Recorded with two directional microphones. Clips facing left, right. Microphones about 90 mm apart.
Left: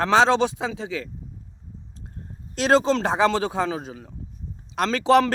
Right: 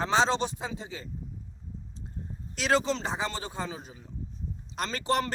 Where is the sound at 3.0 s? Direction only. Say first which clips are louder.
Left 12 dB; 75° left (ahead or behind).